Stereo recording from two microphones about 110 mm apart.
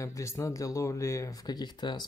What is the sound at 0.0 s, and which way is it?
Speech, 25° left (ahead or behind).